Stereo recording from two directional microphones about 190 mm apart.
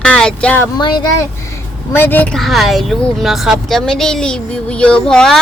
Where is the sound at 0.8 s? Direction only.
25° left (ahead or behind).